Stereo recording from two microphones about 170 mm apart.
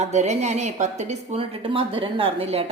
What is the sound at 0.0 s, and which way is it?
A woman's voice, 40° right (ahead or behind).